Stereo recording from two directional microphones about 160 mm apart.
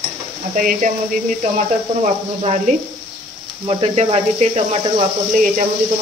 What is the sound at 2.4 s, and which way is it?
Speech, 45° right (ahead or behind).